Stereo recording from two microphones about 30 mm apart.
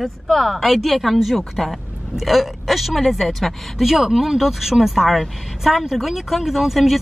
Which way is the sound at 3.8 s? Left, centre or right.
Centre.